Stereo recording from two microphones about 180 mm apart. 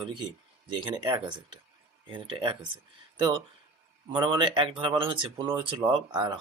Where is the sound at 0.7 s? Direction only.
25° right (ahead or behind).